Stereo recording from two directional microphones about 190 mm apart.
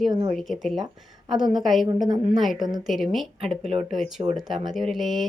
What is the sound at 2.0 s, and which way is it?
Speech, 20° right (ahead or behind).